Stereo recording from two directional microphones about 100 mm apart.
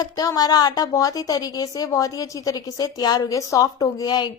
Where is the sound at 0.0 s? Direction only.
40° left (ahead or behind).